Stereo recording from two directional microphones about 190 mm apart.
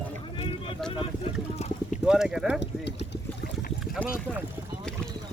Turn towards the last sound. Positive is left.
turn(degrees=5)  # may be behind; listen again after turning